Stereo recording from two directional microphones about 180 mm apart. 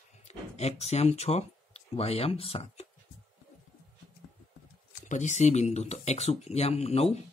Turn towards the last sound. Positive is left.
turn(degrees=35)  # may be behind; listen again after turning